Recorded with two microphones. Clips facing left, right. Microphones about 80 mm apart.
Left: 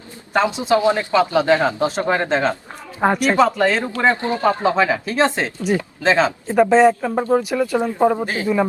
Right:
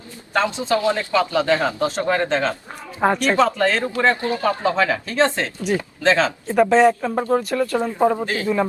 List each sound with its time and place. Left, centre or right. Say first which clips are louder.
0.7 s speech: left 4 dB; left
3.0 s speech: left 2 dB; centre
6.6 s speech: left 2 dB; centre
7.8 s speech: left 2 dB; centre